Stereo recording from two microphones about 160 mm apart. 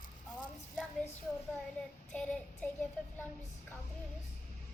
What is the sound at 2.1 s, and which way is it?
Child singing, 5° left (ahead or behind).